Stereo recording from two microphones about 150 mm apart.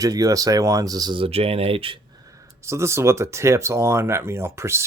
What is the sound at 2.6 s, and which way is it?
Speech, 20° right (ahead or behind).